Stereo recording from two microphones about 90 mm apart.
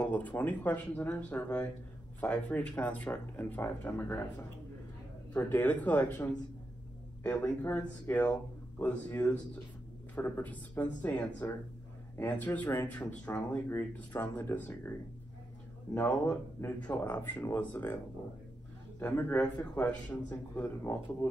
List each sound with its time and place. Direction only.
0.0 s speech: 20° left (ahead or behind)
5.3 s speech: 20° left (ahead or behind)
13.7 s speech: 25° left (ahead or behind)
16.8 s speech: 20° left (ahead or behind)
18.9 s speech: 25° left (ahead or behind)